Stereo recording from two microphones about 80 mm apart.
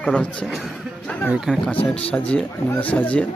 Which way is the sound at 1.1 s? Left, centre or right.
Left.